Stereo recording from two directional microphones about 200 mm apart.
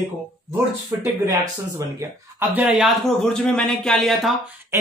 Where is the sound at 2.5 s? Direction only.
5° right (ahead or behind).